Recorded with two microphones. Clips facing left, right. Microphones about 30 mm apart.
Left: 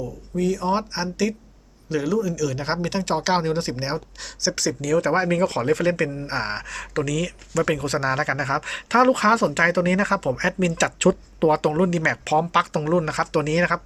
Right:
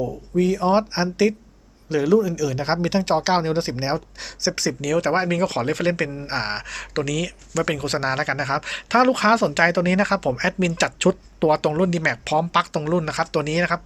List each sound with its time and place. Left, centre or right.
0.3 s speech: right
5.1 s speech: right